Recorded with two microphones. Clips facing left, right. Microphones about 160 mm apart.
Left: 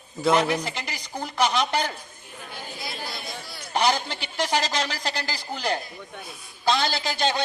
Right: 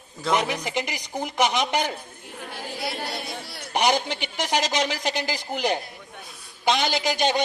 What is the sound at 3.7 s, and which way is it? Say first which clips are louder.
A man's voice: right 1 dB; 15° right (ahead or behind).